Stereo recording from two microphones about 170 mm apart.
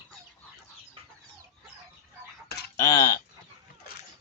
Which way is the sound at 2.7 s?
25° left (ahead or behind).